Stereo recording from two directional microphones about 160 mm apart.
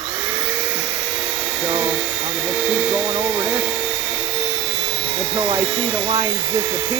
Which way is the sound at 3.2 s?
15° right (ahead or behind).